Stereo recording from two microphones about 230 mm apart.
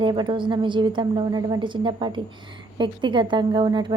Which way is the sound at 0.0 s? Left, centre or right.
Centre.